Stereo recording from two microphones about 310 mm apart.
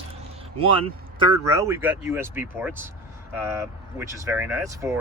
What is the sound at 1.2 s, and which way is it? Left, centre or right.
Speech, centre.